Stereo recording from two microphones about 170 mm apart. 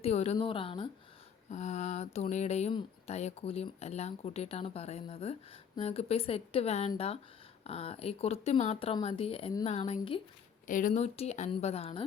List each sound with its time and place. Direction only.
0.0 s speech: 40° left (ahead or behind)
1.5 s speech: 40° left (ahead or behind)
10.7 s speech: 50° left (ahead or behind)